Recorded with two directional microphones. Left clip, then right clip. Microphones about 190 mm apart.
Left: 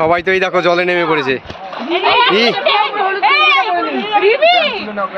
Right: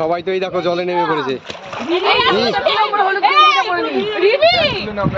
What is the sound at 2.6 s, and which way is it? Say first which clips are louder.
Speech: left 1 dB; 90° right.